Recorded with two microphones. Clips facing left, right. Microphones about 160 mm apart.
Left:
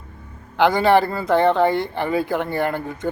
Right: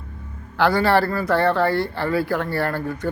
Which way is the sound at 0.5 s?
20° left (ahead or behind).